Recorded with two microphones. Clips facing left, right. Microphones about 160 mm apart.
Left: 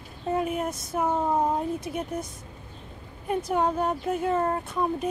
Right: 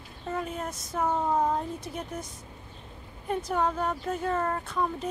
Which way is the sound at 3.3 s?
15° left (ahead or behind).